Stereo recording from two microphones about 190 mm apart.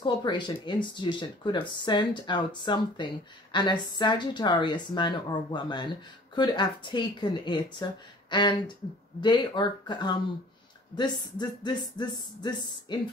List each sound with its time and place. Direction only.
0.0 s speech: 25° left (ahead or behind)